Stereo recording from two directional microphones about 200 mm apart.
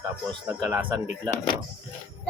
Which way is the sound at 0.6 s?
10° right (ahead or behind).